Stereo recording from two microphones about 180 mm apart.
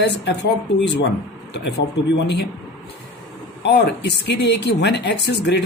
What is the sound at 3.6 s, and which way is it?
Speech, 70° left (ahead or behind).